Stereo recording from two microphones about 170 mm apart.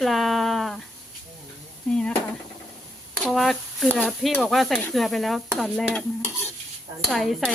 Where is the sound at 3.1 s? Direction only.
Centre (ahead or behind).